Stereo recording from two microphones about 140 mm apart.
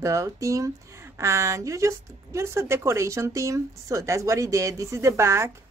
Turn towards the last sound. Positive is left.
turn(degrees=-20)  # may be behind; listen again after turning